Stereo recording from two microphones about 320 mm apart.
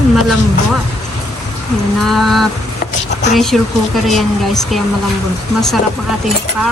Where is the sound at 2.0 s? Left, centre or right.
Centre.